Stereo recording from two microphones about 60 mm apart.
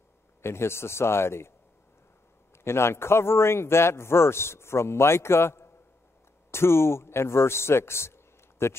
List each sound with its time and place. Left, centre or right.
0.4 s a man's voice: left
2.5 s a man's voice: left